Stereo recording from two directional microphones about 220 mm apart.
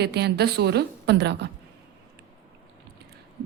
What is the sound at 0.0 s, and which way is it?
A woman's voice, 50° right (ahead or behind).